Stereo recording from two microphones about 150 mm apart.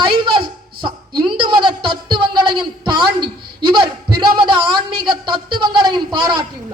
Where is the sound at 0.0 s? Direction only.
35° right (ahead or behind).